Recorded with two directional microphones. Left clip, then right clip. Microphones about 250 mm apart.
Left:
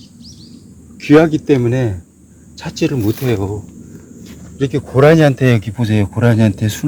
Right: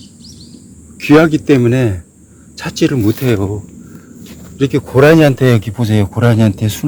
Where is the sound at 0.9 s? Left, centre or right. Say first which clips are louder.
Right 1 dB; right.